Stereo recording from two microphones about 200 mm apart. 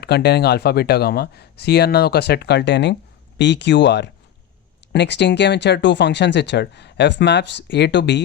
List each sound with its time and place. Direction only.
0.0 s speech: 55° left (ahead or behind)